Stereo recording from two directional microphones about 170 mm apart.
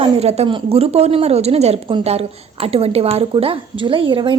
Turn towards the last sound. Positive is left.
turn(degrees=-30)  # may be behind; listen again after turning